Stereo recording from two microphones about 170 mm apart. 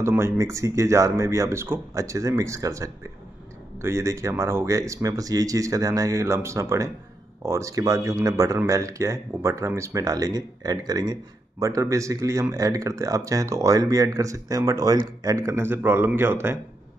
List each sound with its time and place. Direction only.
0.0 s speech: 15° right (ahead or behind)